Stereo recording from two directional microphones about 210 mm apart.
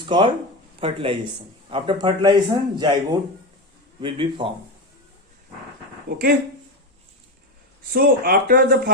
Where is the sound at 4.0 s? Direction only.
25° right (ahead or behind).